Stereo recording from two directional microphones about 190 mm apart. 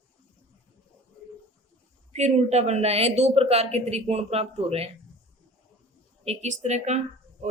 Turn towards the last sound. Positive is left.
turn(degrees=-35)  # may be behind; listen again after turning